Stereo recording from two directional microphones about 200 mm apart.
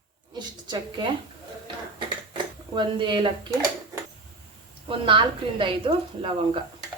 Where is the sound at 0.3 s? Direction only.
20° right (ahead or behind).